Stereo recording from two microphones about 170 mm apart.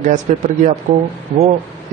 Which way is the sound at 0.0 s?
45° right (ahead or behind).